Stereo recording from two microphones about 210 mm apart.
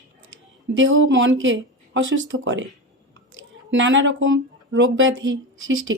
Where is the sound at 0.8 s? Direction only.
65° right (ahead or behind).